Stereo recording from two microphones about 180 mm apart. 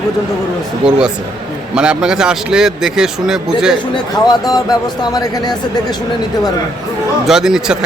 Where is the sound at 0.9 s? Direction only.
5° right (ahead or behind).